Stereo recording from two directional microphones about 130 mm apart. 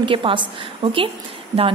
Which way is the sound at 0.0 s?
40° right (ahead or behind).